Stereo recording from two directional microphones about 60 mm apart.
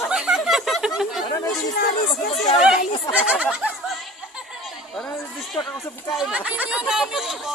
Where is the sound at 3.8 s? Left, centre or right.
Centre.